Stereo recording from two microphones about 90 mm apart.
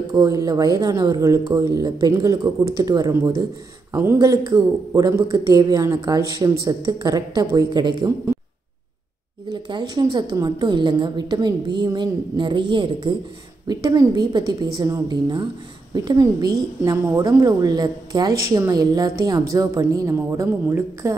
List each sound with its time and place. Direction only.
0.1 s a woman's voice: 45° right (ahead or behind)
4.2 s a woman's voice: 40° right (ahead or behind)
9.5 s a woman's voice: 55° right (ahead or behind)
13.7 s a woman's voice: 45° right (ahead or behind)